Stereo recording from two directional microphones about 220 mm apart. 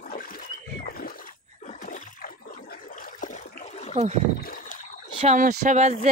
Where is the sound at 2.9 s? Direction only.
35° left (ahead or behind).